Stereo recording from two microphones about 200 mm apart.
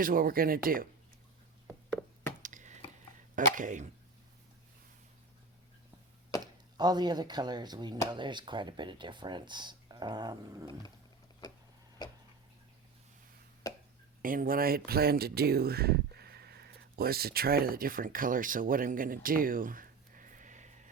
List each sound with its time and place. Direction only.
0.0 s speech: 45° right (ahead or behind)
2.4 s a sound: 40° right (ahead or behind)
3.3 s speech: 40° right (ahead or behind)
6.4 s speech: 20° right (ahead or behind)
14.2 s speech: 45° right (ahead or behind)